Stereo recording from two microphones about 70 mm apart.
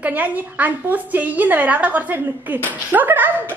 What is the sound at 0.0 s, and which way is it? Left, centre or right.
A woman's voice, right.